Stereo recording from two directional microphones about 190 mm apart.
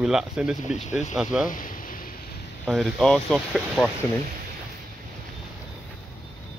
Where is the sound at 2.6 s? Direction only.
Centre (ahead or behind).